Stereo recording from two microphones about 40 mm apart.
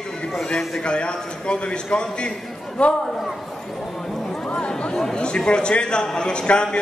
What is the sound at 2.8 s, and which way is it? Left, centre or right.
Speech, left.